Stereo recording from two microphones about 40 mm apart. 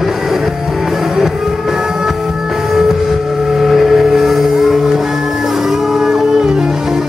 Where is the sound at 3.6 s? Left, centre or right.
Centre.